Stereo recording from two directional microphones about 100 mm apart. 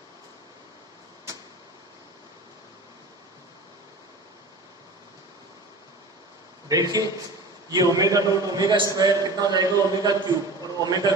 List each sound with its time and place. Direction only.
6.7 s a man's voice: 40° right (ahead or behind)